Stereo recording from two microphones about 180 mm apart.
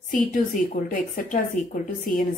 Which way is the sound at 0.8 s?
45° left (ahead or behind).